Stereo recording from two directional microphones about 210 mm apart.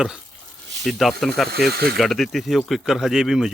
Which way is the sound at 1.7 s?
50° right (ahead or behind).